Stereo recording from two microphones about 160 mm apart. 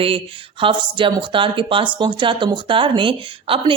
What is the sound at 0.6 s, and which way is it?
Speech, 30° right (ahead or behind).